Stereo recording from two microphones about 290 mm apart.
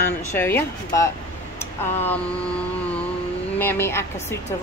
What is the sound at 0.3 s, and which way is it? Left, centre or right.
Speech, centre.